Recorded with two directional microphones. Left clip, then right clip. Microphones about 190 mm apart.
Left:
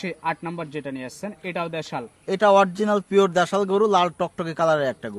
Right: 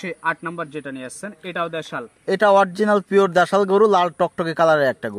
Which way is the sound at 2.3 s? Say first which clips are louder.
Right 2 dB; 25° right (ahead or behind).